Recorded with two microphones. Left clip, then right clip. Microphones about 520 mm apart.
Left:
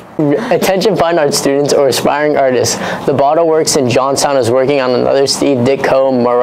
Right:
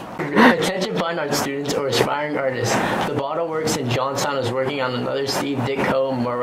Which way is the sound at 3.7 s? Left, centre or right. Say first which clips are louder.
Left 11 dB; left.